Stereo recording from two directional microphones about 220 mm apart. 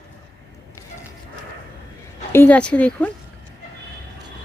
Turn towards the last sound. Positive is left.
turn(degrees=5)  # may be behind; listen again after turning